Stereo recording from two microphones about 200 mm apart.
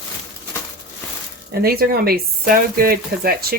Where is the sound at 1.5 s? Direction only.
50° right (ahead or behind).